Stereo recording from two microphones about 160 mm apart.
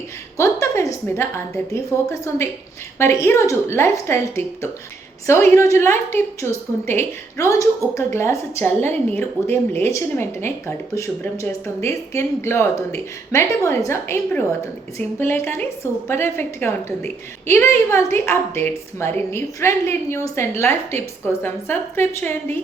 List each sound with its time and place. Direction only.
0.3 s a woman's voice: 20° left (ahead or behind)